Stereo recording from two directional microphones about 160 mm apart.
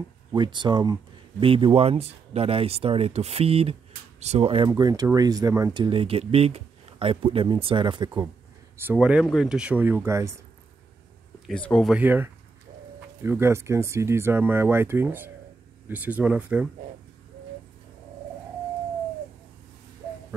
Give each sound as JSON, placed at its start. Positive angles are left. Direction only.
{"t": 0.3, "sound": "speech", "side_deg": -30}
{"t": 8.8, "sound": "speech", "side_deg": -5}
{"t": 11.4, "sound": "speech", "side_deg": 5}
{"t": 11.9, "sound": "speech", "side_deg": -10}